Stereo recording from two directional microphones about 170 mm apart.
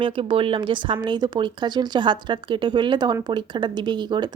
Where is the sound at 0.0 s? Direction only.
30° right (ahead or behind).